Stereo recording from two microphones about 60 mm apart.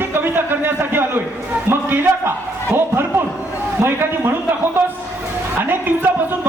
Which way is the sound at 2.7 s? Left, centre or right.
Right.